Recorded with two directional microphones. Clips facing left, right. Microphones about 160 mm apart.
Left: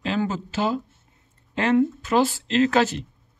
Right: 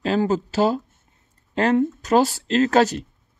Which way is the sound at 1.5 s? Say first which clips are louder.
Right 1 dB; 35° right (ahead or behind).